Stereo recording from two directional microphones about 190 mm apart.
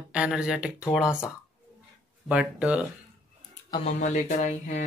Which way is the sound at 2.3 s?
5° right (ahead or behind).